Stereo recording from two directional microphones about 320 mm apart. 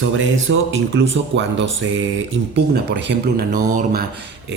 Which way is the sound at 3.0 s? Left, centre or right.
Right.